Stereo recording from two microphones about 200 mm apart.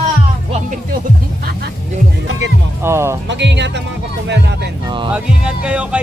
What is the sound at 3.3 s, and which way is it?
Speech, 60° right (ahead or behind).